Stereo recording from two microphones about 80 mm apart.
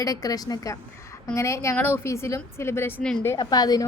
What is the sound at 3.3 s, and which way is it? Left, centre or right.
Speech, left.